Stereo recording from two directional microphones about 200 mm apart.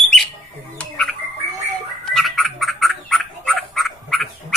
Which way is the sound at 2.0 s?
Centre (ahead or behind).